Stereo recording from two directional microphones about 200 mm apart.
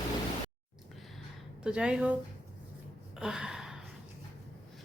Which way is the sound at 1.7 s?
5° right (ahead or behind).